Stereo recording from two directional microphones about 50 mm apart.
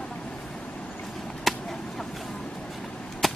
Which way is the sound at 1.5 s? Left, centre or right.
Centre.